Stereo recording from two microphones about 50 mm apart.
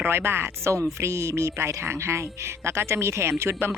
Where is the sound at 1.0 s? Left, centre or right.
Right.